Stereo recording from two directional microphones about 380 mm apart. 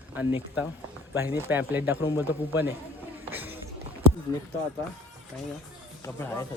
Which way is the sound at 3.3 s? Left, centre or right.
Centre.